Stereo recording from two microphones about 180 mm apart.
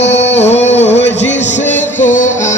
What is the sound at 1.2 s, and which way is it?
Music, 40° left (ahead or behind).